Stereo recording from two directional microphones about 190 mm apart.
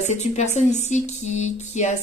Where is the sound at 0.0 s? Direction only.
40° left (ahead or behind).